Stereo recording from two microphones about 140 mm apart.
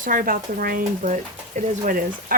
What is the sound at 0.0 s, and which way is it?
Speech, 75° right (ahead or behind).